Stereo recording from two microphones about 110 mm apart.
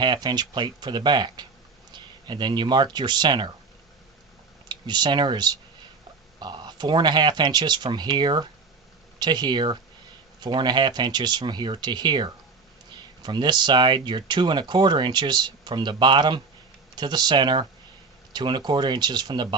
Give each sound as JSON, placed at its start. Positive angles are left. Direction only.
{"t": 0.0, "sound": "speech", "side_deg": -40}
{"t": 4.7, "sound": "speech", "side_deg": -40}